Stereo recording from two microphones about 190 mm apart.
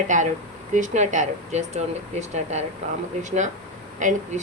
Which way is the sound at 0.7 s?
40° right (ahead or behind).